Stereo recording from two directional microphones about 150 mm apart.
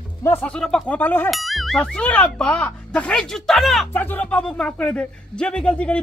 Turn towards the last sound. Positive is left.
turn(degrees=5)  # may be behind; listen again after turning